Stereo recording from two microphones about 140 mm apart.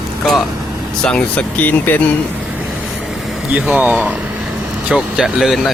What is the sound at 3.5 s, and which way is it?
Speech, 10° right (ahead or behind).